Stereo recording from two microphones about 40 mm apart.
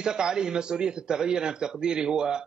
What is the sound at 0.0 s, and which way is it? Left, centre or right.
Speech, centre.